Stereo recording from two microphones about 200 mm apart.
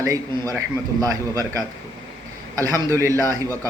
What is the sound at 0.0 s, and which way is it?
A man's voice, 15° right (ahead or behind).